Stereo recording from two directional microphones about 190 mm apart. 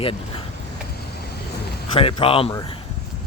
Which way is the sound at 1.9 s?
25° left (ahead or behind).